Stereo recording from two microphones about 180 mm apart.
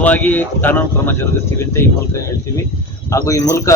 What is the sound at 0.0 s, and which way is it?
A man's voice, 10° left (ahead or behind).